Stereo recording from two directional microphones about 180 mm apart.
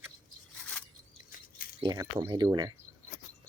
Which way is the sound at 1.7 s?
20° right (ahead or behind).